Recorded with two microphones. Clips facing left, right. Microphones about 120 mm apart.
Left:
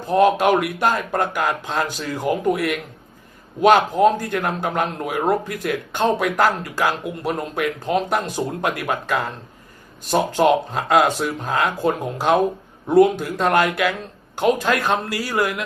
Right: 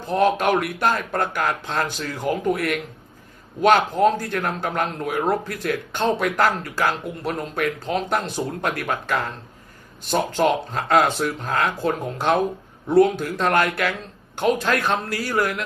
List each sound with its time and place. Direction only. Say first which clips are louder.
0.1 s speech: left 3 dB; 15° left (ahead or behind)
10.8 s speech: left 2 dB; centre (ahead or behind)
11.4 s speech: left 3 dB; 10° left (ahead or behind)